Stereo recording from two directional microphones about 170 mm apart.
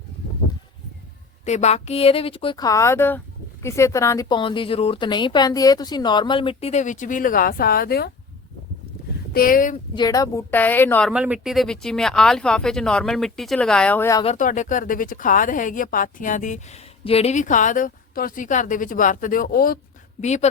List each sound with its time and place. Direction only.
1.5 s a woman's voice: 40° left (ahead or behind); by 8.1 s 65° left (ahead or behind)
9.3 s a woman's voice: 55° left (ahead or behind)
9.9 s a woman's voice: 25° left (ahead or behind)
11.1 s speech: 5° right (ahead or behind); by 14.2 s 10° left (ahead or behind)
14.3 s a woman's voice: 50° left (ahead or behind)
17.0 s a woman's voice: 35° left (ahead or behind); by 19.8 s 60° left (ahead or behind)
20.2 s a woman's voice: 45° left (ahead or behind)